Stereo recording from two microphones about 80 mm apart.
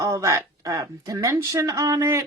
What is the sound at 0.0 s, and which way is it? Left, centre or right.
A woman's voice, right.